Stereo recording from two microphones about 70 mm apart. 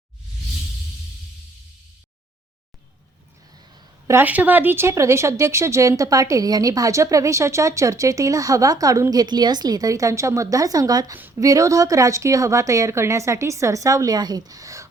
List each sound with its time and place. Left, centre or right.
4.2 s speech: right
11.1 s a woman's voice: right
11.3 s speech: right